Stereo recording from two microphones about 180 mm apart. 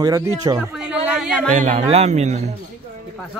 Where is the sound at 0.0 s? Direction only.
20° right (ahead or behind).